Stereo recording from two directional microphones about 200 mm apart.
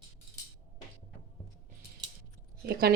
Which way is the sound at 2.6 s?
50° right (ahead or behind).